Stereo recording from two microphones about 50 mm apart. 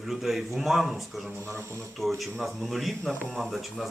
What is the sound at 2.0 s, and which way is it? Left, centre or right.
Speech, centre.